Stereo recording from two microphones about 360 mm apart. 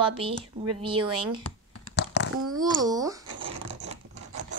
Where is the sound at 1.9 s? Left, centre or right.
Left.